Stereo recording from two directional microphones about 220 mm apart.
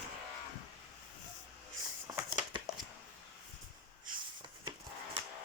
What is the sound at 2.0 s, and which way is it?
Crumpling, 20° right (ahead or behind).